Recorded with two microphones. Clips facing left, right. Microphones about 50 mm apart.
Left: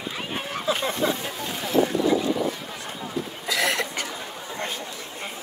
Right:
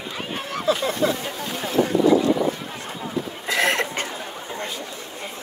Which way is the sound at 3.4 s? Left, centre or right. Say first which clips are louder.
Right 3 dB; right.